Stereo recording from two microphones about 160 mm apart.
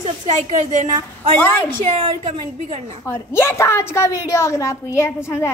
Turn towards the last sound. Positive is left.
turn(degrees=15)  # may be behind; listen again after turning